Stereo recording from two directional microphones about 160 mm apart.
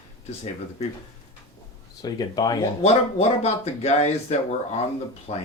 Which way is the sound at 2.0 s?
25° left (ahead or behind).